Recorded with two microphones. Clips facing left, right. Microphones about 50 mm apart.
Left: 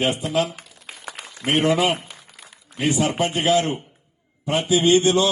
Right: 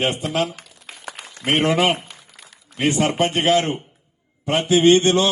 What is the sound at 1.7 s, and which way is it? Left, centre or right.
Speech, right.